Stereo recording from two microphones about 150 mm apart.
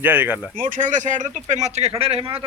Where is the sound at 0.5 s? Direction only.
65° right (ahead or behind); by 2.4 s 40° right (ahead or behind).